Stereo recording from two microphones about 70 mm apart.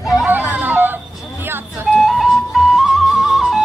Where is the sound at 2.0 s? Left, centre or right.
Centre.